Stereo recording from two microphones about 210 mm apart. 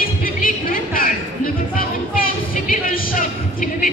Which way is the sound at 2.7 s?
40° left (ahead or behind).